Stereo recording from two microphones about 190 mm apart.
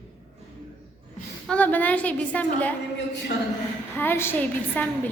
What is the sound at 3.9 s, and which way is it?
Speech, 10° left (ahead or behind).